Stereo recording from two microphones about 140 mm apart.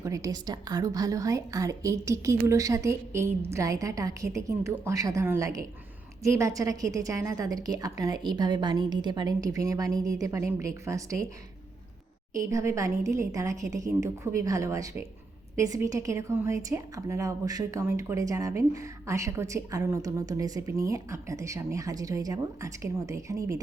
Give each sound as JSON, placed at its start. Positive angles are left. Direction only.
{"t": 0.0, "sound": "a woman's voice", "side_deg": -25}
{"t": 12.3, "sound": "a woman's voice", "side_deg": -20}